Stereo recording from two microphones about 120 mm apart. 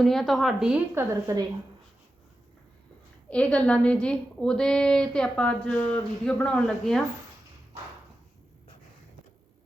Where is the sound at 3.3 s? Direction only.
10° left (ahead or behind).